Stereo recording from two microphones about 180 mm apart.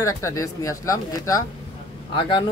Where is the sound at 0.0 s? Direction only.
20° left (ahead or behind).